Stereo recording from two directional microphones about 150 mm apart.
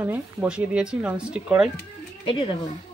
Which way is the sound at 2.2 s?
35° left (ahead or behind).